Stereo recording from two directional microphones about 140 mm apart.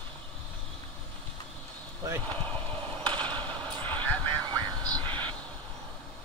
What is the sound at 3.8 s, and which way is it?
Vehicle, 10° left (ahead or behind).